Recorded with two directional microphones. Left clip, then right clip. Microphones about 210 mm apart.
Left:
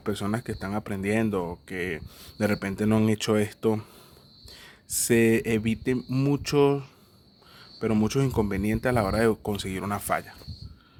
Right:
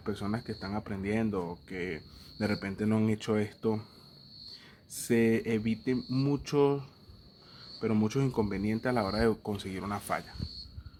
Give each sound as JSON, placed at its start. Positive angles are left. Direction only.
{"t": 0.0, "sound": "speech", "side_deg": 50}